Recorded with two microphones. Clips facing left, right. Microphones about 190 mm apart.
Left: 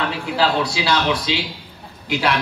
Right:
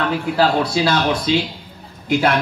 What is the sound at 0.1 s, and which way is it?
A man's voice, 50° right (ahead or behind).